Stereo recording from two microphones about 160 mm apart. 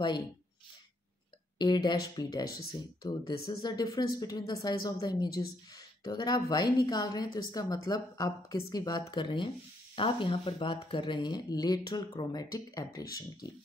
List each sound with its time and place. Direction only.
1.6 s speech: 25° left (ahead or behind)